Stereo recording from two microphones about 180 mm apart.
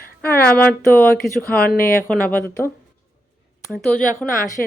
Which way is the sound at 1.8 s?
55° left (ahead or behind).